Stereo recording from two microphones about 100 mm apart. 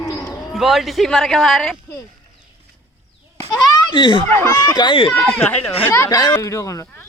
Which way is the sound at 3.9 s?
50° left (ahead or behind).